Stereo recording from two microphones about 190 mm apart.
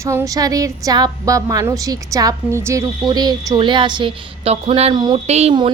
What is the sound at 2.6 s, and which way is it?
A woman's voice, 15° right (ahead or behind).